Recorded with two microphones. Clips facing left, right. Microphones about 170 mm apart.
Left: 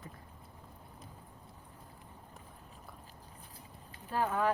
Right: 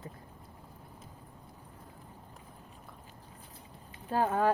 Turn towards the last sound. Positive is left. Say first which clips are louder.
# right 4 dB
turn(degrees=-35)  # may be behind; listen again after turning